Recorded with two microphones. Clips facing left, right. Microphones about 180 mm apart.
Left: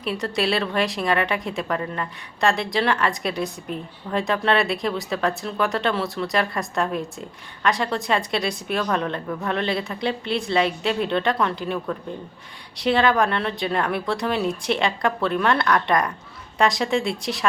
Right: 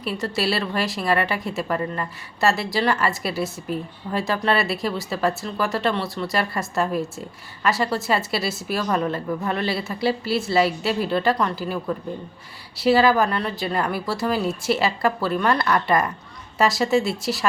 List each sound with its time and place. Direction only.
0.0 s speech: centre (ahead or behind)